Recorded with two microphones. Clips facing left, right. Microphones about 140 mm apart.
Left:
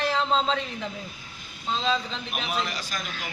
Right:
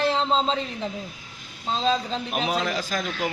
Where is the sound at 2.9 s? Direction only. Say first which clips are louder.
Right 7 dB; 90° right.